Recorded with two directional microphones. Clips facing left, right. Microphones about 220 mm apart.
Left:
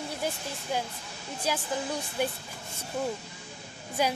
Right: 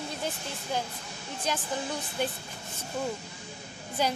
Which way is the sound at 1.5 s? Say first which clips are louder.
Left 1 dB; 10° left (ahead or behind).